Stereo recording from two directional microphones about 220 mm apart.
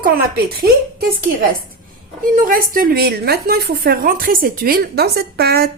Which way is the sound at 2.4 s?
40° right (ahead or behind).